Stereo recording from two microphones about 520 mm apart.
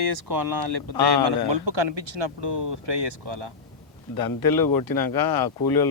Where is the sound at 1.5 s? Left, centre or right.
Right.